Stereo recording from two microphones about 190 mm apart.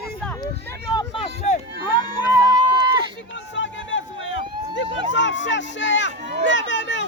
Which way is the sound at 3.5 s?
75° left (ahead or behind).